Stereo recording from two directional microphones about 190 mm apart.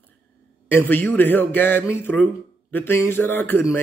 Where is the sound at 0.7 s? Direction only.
10° left (ahead or behind).